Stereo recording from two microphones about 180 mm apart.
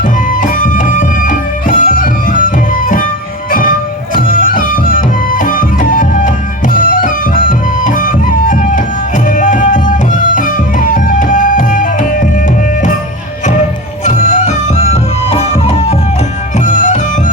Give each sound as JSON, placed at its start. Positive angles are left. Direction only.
{"t": 0.6, "sound": "music", "side_deg": 50}
{"t": 4.1, "sound": "music", "side_deg": 50}
{"t": 14.0, "sound": "music", "side_deg": 40}